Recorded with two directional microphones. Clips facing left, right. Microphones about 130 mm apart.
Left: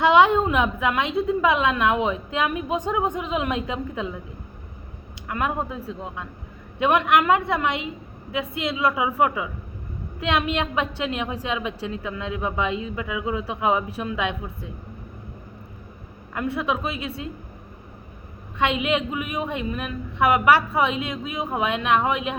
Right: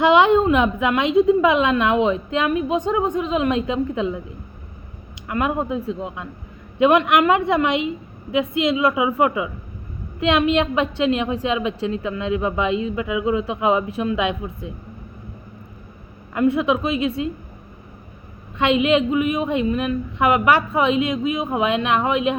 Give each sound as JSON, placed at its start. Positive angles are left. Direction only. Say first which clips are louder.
{"t": 0.0, "sound": "a woman's voice", "louder": "right 2 dB", "side_deg": 0}
{"t": 5.3, "sound": "a woman's voice", "louder": "right 4 dB", "side_deg": 0}
{"t": 16.3, "sound": "a woman's voice", "louder": "right 7 dB", "side_deg": 0}
{"t": 18.6, "sound": "a woman's voice", "louder": "right 6 dB", "side_deg": 0}